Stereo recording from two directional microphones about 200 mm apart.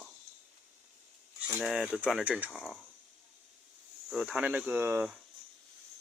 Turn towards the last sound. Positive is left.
turn(degrees=-10)  # may be behind; listen again after turning